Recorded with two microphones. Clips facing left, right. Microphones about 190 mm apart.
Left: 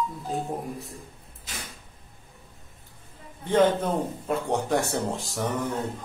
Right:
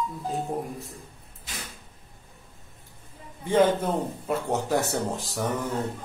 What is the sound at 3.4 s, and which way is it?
A man's voice, 10° right (ahead or behind).